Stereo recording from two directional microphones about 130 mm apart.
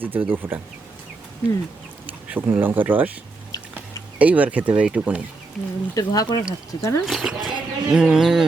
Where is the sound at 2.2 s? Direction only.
15° right (ahead or behind).